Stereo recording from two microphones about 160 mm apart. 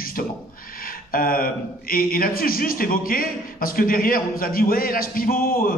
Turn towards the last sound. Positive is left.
turn(degrees=65)  # may be behind; listen again after turning